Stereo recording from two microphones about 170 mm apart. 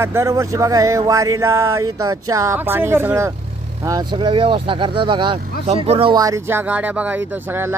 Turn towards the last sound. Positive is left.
turn(degrees=-20)  # may be behind; listen again after turning